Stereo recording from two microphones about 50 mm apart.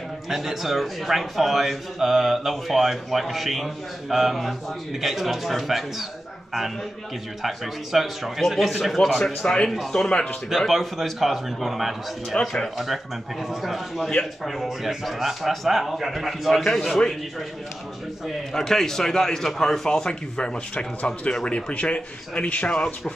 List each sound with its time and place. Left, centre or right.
0.3 s a man's voice: centre
7.4 s a man's voice: centre
12.4 s a man's voice: centre
12.7 s a man's voice: centre
18.2 s a man's voice: centre; by 22.7 s left